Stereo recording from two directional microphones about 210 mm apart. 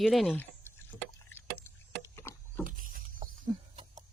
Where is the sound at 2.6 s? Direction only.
40° right (ahead or behind).